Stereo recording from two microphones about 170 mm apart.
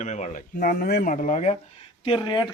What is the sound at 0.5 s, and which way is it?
Speech, 65° left (ahead or behind).